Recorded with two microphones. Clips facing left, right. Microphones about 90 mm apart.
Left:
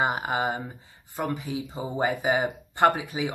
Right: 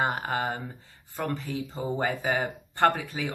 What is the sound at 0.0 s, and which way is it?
Speech, 15° left (ahead or behind).